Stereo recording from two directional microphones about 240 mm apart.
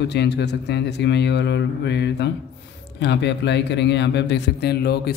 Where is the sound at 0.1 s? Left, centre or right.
Left.